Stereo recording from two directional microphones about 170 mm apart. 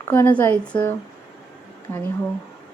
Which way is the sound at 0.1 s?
10° left (ahead or behind).